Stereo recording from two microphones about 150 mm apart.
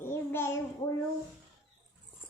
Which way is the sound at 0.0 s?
15° left (ahead or behind).